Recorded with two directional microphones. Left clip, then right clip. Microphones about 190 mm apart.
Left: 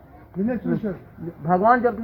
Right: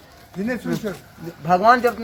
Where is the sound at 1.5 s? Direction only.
50° right (ahead or behind).